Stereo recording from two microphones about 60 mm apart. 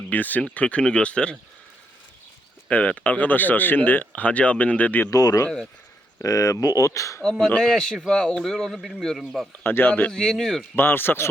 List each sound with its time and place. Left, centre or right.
0.1 s speech: left
2.6 s speech: left
5.1 s speech: left
7.2 s a man's voice: centre
9.6 s speech: left
10.1 s a man's voice: centre
10.8 s speech: left